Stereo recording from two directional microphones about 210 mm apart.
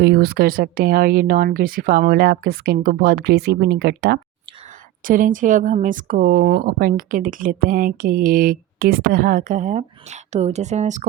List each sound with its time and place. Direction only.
0.0 s speech: 50° right (ahead or behind)
5.0 s speech: 40° right (ahead or behind)